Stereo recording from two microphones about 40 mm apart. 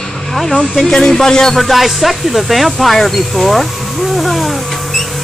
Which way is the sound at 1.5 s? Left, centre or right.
Centre.